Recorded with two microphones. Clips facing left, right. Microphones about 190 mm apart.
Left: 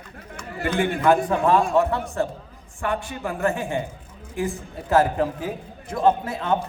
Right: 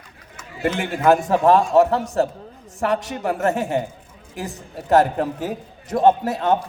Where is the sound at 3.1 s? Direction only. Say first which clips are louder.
Right 3 dB; 40° right (ahead or behind).